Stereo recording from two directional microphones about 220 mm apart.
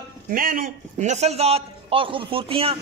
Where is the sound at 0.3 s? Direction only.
40° right (ahead or behind).